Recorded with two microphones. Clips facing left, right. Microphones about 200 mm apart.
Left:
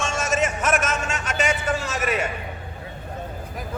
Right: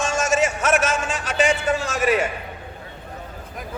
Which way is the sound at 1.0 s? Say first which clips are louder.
Right 4 dB; 30° right (ahead or behind).